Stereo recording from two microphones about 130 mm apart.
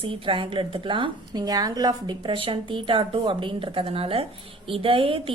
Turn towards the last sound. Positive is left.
turn(degrees=-45)  # may be behind; listen again after turning